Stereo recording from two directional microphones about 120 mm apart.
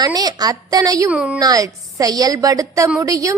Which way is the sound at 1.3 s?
30° right (ahead or behind).